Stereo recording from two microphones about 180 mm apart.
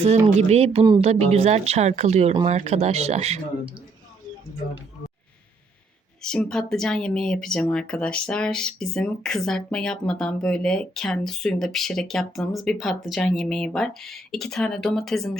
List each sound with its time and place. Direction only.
0.3 s speech: 35° right (ahead or behind)
6.2 s speech: 5° left (ahead or behind)